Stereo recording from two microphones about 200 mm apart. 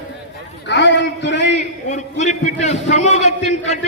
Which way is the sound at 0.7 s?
65° left (ahead or behind).